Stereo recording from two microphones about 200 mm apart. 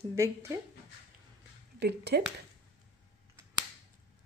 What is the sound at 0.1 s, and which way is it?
Speech, 15° right (ahead or behind).